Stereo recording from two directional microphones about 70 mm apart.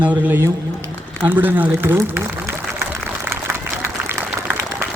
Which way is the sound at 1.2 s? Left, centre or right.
Right.